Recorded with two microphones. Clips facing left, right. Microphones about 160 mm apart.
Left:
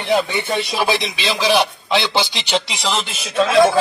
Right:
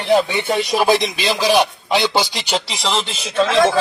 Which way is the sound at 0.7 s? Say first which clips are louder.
Right 7 dB; 45° right (ahead or behind).